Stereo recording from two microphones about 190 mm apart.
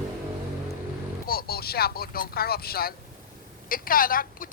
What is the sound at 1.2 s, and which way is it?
A woman's voice, 50° left (ahead or behind).